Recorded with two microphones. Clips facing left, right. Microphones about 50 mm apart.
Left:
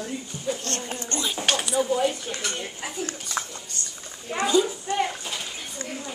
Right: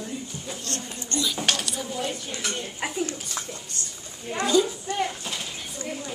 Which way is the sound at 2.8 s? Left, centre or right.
Right.